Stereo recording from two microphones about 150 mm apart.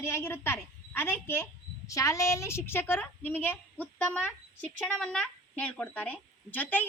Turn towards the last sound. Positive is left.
turn(degrees=10)  # may be behind; listen again after turning